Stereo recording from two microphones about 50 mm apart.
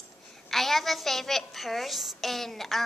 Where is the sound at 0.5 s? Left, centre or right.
Centre.